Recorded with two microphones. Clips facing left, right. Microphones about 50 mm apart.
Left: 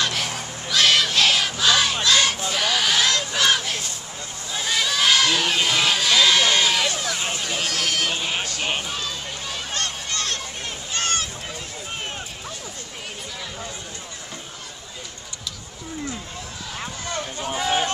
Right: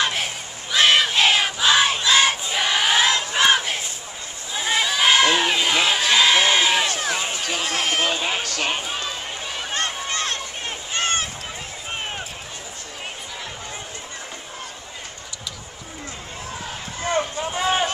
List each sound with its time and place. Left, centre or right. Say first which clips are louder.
0.0 s crowd: right 1 dB; right
2.0 s battle cry: right 2 dB; right
4.8 s crowd: right 3 dB; centre
6.9 s run: right 2 dB; right
8.8 s a sound: right 1 dB; right
17.0 s a sound: right 8 dB; right